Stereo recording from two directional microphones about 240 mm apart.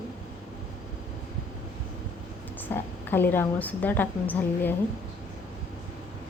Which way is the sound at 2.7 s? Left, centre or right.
Centre.